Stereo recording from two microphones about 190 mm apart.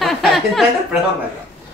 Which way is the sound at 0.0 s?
Centre (ahead or behind).